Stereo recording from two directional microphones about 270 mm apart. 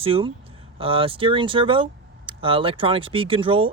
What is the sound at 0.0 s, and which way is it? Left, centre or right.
Speech, centre.